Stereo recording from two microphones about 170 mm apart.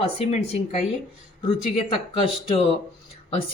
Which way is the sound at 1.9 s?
35° left (ahead or behind).